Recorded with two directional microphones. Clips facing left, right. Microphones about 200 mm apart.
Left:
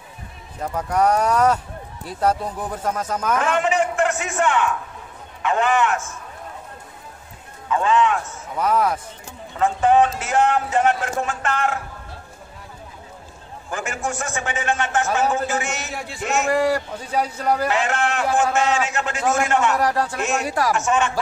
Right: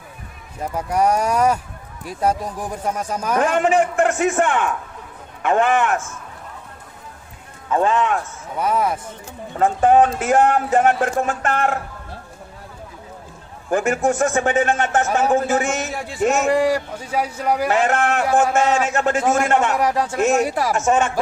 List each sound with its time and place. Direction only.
0.6 s speech: 10° right (ahead or behind)
3.3 s speech: 45° right (ahead or behind)
7.7 s speech: 50° right (ahead or behind)
9.6 s speech: 50° right (ahead or behind)
13.7 s speech: 50° right (ahead or behind)
16.4 s speech: 15° right (ahead or behind)
17.6 s speech: 50° right (ahead or behind)
19.8 s speech: 20° right (ahead or behind)
20.7 s speech: 45° right (ahead or behind)